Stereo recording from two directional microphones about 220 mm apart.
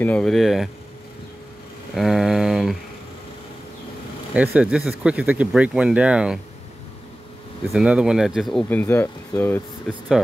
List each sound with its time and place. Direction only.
0.0 s speech: 5° left (ahead or behind)
2.0 s speech: centre (ahead or behind)
4.3 s speech: 5° right (ahead or behind)
7.7 s speech: 5° right (ahead or behind)